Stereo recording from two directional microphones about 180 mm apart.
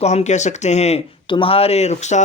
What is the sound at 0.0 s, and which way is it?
Speech, 40° left (ahead or behind).